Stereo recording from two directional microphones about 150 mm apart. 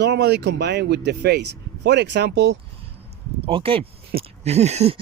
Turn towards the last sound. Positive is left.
turn(degrees=-45)  # may be behind; listen again after turning